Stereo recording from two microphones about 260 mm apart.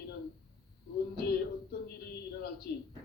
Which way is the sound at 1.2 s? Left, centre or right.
Left.